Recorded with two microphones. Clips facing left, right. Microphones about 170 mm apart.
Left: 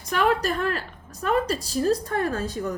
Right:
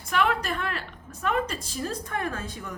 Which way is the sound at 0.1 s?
40° left (ahead or behind).